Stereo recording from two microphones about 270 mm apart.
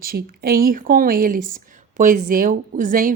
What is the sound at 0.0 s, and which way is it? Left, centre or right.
Speech, right.